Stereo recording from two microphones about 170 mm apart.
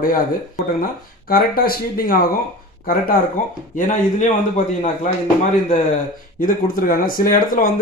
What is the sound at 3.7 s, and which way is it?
Speech, 50° left (ahead or behind).